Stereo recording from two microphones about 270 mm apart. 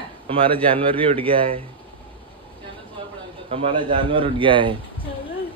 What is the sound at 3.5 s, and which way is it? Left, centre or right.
Speech, centre.